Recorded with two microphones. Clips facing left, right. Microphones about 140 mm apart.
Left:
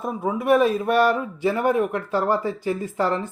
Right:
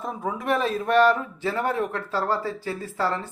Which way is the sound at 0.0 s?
10° left (ahead or behind).